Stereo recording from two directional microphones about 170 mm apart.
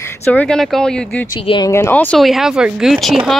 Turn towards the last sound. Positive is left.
turn(degrees=0)  # may be behind; listen again after turning